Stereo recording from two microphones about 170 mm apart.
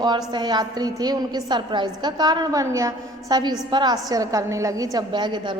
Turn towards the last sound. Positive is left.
turn(degrees=-25)  # may be behind; listen again after turning